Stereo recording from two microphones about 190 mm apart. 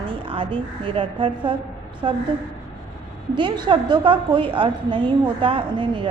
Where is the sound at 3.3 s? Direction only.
25° right (ahead or behind).